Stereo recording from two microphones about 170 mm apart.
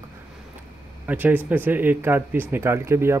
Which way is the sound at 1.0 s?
10° right (ahead or behind).